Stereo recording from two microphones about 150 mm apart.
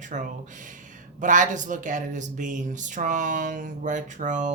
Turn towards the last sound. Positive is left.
turn(degrees=-55)  # may be behind; listen again after turning